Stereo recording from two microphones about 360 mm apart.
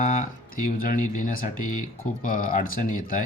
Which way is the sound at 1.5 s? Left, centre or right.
Left.